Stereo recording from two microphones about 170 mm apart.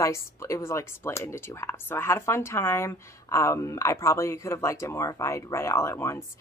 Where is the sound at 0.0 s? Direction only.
15° left (ahead or behind).